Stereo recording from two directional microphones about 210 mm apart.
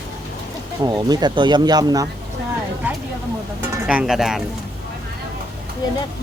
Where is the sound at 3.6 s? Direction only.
5° right (ahead or behind).